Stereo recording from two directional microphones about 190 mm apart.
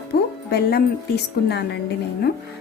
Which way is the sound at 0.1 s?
60° left (ahead or behind).